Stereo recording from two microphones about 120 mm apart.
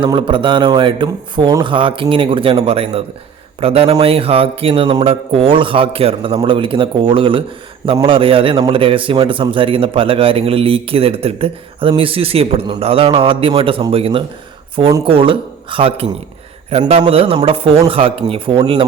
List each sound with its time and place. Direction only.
0.0 s a man's voice: 45° right (ahead or behind)
17.1 s a man's voice: 50° right (ahead or behind)